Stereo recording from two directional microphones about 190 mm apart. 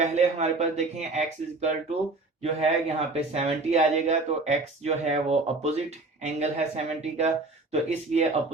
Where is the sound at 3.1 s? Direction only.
35° right (ahead or behind).